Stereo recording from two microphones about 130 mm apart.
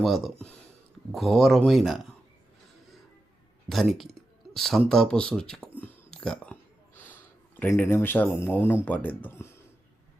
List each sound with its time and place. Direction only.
0.0 s speech: centre (ahead or behind)
3.7 s speech: centre (ahead or behind)
5.8 s a sound: 5° left (ahead or behind)
8.6 s speech: 15° left (ahead or behind)